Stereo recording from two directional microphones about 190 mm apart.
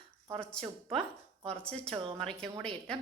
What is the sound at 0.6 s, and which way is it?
Speech, 30° right (ahead or behind).